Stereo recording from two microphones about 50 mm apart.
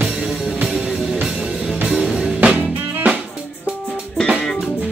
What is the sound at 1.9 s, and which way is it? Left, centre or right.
Music, centre.